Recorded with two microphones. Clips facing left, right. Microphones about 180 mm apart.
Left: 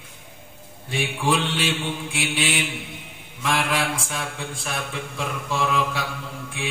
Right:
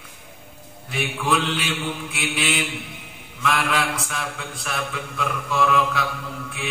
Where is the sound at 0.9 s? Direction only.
30° left (ahead or behind).